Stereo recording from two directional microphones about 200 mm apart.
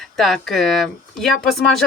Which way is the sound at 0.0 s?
Centre (ahead or behind).